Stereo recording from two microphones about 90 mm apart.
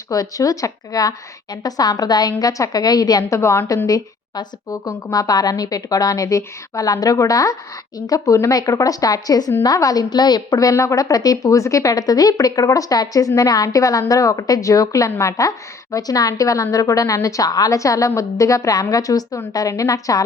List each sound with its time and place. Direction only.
0.1 s a woman's voice: 40° left (ahead or behind)
3.8 s a woman's voice: 40° left (ahead or behind)